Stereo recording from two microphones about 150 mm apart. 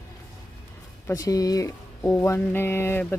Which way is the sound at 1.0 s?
25° left (ahead or behind).